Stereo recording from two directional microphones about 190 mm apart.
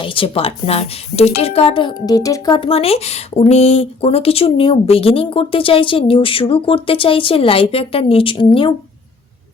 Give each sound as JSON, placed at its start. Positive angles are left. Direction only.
{"t": 0.0, "sound": "a woman's voice", "side_deg": 25}